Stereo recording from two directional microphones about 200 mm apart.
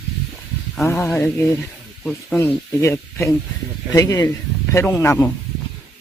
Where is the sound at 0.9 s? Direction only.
10° left (ahead or behind).